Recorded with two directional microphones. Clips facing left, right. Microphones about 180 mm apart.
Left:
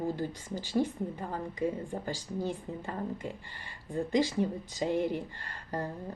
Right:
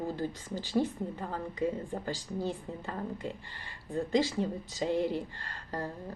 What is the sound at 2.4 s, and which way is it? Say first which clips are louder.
A woman's voice: left 1 dB; 15° left (ahead or behind).